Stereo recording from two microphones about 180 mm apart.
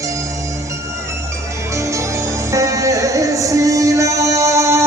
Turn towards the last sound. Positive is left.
turn(degrees=-15)  # may be behind; listen again after turning